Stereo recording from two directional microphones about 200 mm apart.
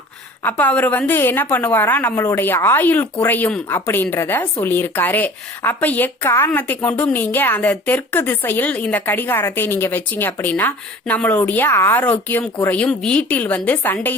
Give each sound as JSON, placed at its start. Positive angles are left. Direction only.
{"t": 0.4, "sound": "a woman's voice", "side_deg": 10}